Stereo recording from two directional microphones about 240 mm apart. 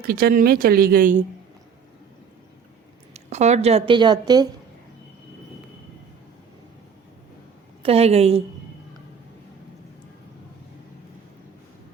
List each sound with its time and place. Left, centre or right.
0.1 s speech: right
3.1 s a woman's voice: right
7.8 s a woman's voice: right